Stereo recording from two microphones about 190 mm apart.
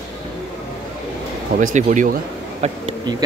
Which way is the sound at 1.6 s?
40° right (ahead or behind).